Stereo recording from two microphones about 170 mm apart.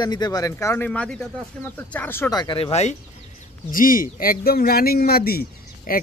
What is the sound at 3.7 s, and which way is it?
Speech, 55° left (ahead or behind).